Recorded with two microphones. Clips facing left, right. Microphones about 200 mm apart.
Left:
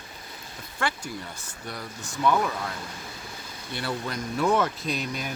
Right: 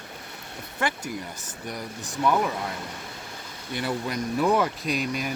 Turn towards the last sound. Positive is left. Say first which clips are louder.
# right 3 dB
turn(degrees=-10)  # may be behind; listen again after turning